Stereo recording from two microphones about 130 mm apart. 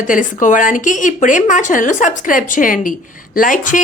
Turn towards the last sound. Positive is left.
turn(degrees=85)